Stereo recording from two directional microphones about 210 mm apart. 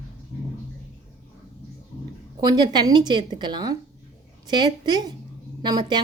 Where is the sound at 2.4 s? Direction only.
20° right (ahead or behind).